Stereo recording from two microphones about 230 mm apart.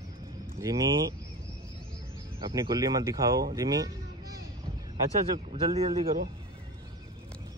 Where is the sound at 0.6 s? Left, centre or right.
Centre.